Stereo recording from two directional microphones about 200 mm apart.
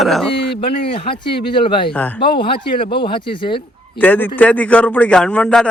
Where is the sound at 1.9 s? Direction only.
10° left (ahead or behind).